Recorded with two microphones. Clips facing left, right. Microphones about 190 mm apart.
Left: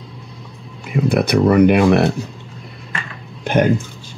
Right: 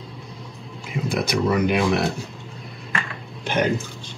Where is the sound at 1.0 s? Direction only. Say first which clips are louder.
Left 8 dB; 60° left (ahead or behind).